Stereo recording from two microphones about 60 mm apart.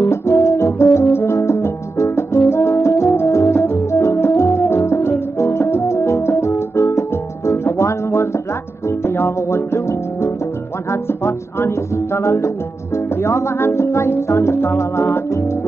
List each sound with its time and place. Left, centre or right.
0.1 s music: left
3.2 s organ: left
8.8 s music: left